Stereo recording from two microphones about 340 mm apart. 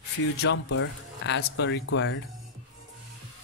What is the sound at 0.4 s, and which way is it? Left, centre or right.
Speech, left.